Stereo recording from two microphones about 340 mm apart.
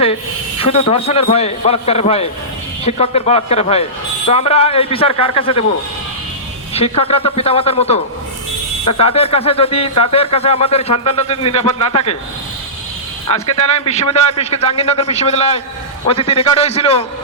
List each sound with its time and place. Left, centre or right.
0.6 s a man's voice: centre
6.7 s a man's voice: centre
13.2 s a man's voice: centre